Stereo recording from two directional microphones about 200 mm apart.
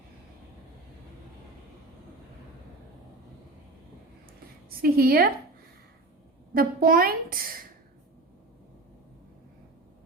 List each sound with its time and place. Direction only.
4.8 s a child's voice: 50° right (ahead or behind)
6.5 s a child's voice: 45° right (ahead or behind)